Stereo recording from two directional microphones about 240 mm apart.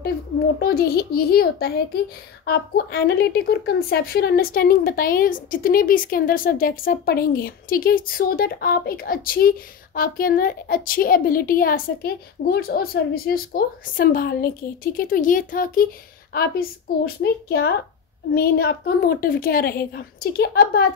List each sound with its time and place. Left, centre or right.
0.6 s a woman's voice: left